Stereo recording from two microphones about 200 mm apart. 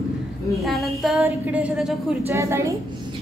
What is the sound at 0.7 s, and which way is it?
A woman's voice, centre (ahead or behind).